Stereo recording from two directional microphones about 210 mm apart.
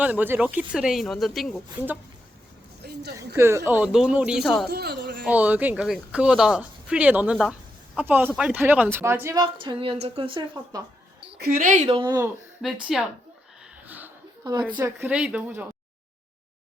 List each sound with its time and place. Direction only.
0.0 s a woman's voice: 10° right (ahead or behind)
2.8 s a sound: 50° right (ahead or behind)
3.3 s speech: 10° right (ahead or behind)
4.7 s speech: 50° right (ahead or behind)
5.2 s a woman's voice: 5° right (ahead or behind)
11.3 s speech: 40° right (ahead or behind); by 12.3 s 20° right (ahead or behind)
12.6 s speech: centre (ahead or behind)
13.8 s a sound: 10° right (ahead or behind)
14.8 s a woman's voice: 10° right (ahead or behind)